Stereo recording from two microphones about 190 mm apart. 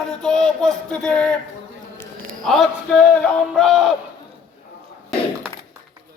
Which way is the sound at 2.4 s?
Centre (ahead or behind).